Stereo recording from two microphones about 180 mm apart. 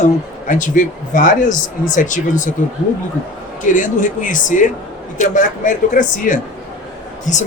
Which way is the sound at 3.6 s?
45° left (ahead or behind).